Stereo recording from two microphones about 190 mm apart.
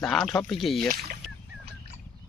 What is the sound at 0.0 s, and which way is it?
Speech, centre (ahead or behind).